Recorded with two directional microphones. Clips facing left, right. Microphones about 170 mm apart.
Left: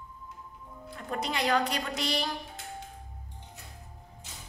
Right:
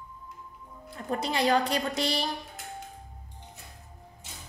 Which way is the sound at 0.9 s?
35° right (ahead or behind).